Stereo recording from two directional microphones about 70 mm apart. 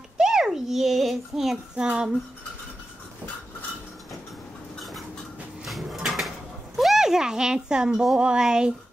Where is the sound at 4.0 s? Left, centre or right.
Centre.